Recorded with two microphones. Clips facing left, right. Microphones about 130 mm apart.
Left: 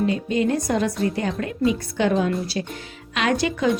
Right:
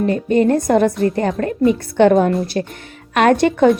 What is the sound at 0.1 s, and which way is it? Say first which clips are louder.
A woman's voice: right 7 dB; 50° right (ahead or behind).